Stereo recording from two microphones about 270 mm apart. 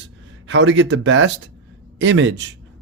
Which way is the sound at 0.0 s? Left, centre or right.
Right.